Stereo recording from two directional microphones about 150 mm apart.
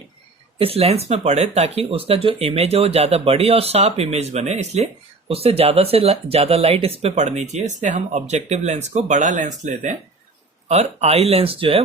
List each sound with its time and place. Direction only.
0.6 s speech: 40° right (ahead or behind)